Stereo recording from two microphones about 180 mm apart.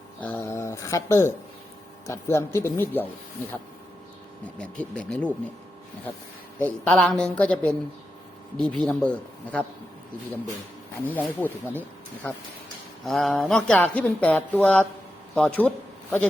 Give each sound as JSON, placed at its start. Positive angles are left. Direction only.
{"t": 0.2, "sound": "speech", "side_deg": 10}
{"t": 4.8, "sound": "speech", "side_deg": 5}
{"t": 6.7, "sound": "speech", "side_deg": 5}
{"t": 11.0, "sound": "a man's voice", "side_deg": 10}